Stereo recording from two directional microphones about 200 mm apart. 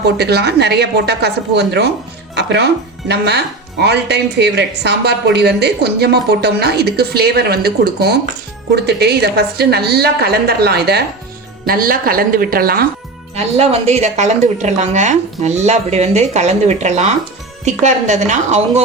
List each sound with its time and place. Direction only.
0.0 s a woman's voice: 55° right (ahead or behind)
2.3 s music: 55° right (ahead or behind)
3.1 s a woman's voice: 55° right (ahead or behind)
13.3 s speech: 30° right (ahead or behind)